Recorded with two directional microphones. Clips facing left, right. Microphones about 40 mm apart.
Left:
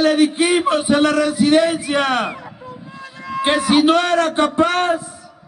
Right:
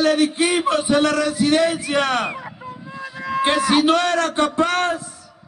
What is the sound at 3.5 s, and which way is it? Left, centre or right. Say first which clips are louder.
A man's voice: left 3 dB; left.